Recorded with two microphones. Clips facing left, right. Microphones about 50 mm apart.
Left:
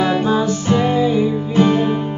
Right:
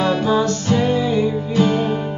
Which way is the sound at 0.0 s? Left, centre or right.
Centre.